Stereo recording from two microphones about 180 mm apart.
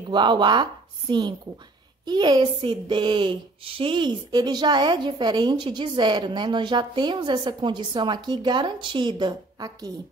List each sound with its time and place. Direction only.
0.1 s speech: 25° right (ahead or behind)